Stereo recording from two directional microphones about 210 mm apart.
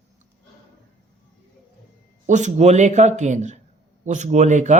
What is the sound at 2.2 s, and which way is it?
Speech, 35° right (ahead or behind).